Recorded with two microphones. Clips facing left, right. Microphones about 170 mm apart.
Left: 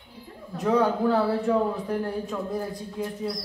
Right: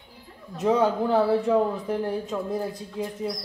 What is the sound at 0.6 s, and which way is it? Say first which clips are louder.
A man's voice: right 1 dB; 20° right (ahead or behind).